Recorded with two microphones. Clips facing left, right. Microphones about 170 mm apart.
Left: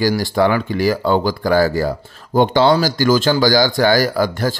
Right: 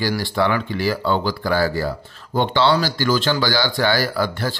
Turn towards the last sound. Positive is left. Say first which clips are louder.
# left 5 dB
turn(degrees=45)  # may be behind; listen again after turning